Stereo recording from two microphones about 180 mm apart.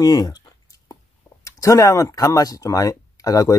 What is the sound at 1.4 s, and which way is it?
Speech, 20° left (ahead or behind).